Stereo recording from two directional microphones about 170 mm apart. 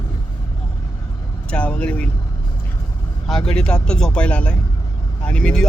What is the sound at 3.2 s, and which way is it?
Speech, 5° left (ahead or behind).